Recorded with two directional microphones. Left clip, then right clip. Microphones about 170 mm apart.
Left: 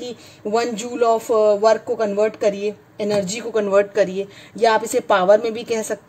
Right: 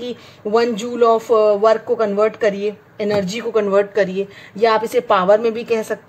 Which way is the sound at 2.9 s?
55° left (ahead or behind).